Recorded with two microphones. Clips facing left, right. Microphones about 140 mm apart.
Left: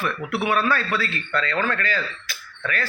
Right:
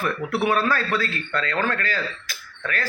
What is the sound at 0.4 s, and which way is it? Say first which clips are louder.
A man's voice: even; 40° right (ahead or behind).